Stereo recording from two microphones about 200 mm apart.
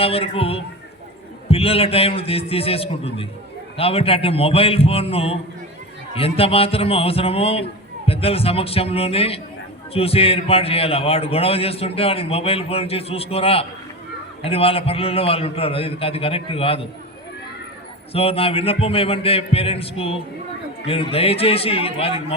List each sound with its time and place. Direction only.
0.0 s a man's voice: 30° left (ahead or behind)
18.1 s a man's voice: 30° left (ahead or behind)